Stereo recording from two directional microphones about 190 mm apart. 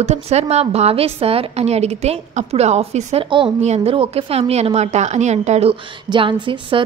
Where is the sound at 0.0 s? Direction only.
35° right (ahead or behind).